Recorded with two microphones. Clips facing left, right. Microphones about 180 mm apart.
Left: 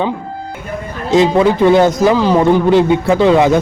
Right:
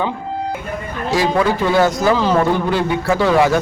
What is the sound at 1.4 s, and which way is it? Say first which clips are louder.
A man's voice: left 4 dB; 20° left (ahead or behind).